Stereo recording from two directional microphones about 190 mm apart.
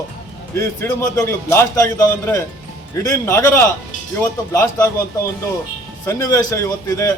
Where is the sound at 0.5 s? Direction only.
15° left (ahead or behind).